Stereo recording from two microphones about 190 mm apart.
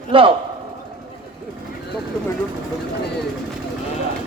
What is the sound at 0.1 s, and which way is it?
Speech, 25° right (ahead or behind).